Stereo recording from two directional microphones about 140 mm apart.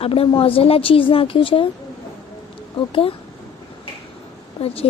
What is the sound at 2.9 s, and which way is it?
Speech, 40° left (ahead or behind).